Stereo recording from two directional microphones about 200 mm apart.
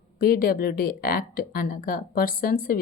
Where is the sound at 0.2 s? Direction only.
45° left (ahead or behind).